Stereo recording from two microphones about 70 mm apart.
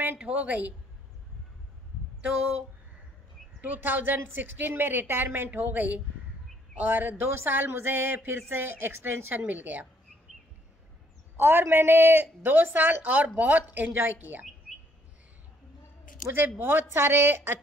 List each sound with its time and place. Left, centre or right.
0.0 s a woman's voice: centre
3.6 s a woman's voice: right
11.3 s a woman's voice: right
16.3 s speech: right